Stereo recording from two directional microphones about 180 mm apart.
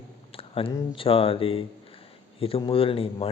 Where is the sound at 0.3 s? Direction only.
30° left (ahead or behind).